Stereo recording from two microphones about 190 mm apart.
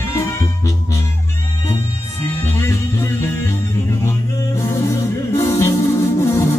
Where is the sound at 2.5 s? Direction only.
15° left (ahead or behind).